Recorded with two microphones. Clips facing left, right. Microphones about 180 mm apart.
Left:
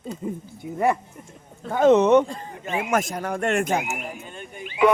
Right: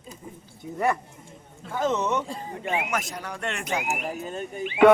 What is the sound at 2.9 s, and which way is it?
Speech, 50° left (ahead or behind).